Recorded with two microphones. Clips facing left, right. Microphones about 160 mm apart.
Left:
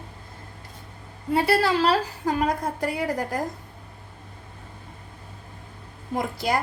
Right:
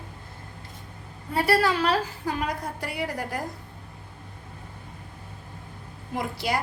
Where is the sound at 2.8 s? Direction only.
45° left (ahead or behind).